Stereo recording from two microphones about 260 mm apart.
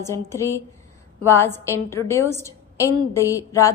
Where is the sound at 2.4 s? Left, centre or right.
Centre.